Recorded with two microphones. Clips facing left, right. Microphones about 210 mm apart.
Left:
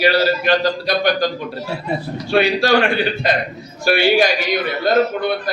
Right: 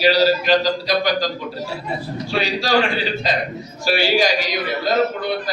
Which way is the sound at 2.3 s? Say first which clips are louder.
Left 5 dB; 60° left (ahead or behind).